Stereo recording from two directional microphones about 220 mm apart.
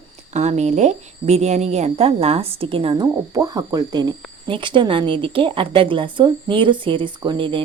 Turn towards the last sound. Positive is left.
turn(degrees=-20)  # may be behind; listen again after turning